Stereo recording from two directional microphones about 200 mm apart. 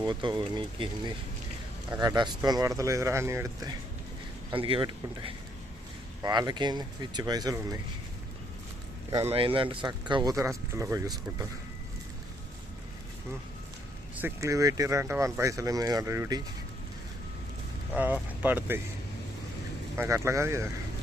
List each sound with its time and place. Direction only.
0.0 s speech: 20° right (ahead or behind)
4.5 s speech: 25° right (ahead or behind)
9.2 s speech: 30° right (ahead or behind)
14.2 s speech: 10° right (ahead or behind)
17.9 s speech: 10° right (ahead or behind)
20.0 s speech: 15° right (ahead or behind)